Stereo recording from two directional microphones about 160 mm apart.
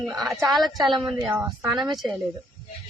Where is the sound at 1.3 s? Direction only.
25° right (ahead or behind).